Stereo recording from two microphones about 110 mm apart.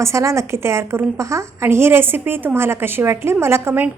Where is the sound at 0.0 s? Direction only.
25° right (ahead or behind).